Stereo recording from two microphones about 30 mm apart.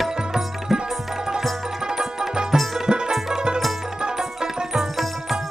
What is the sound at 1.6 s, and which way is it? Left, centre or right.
Tabla, right.